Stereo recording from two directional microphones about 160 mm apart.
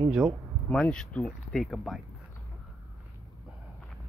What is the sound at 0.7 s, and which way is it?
Speech, 5° left (ahead or behind).